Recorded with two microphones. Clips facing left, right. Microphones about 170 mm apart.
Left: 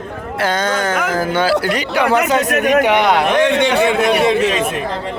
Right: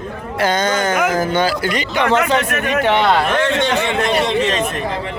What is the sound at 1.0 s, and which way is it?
Speech, 10° right (ahead or behind).